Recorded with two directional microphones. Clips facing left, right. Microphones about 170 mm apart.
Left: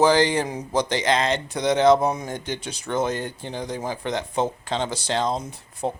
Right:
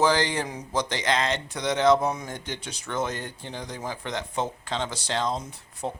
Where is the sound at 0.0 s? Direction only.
25° left (ahead or behind).